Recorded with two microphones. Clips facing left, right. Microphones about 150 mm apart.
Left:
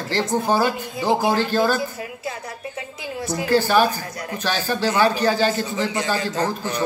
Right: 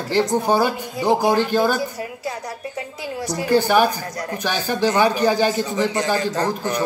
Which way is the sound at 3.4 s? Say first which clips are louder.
Right 1 dB; 15° right (ahead or behind).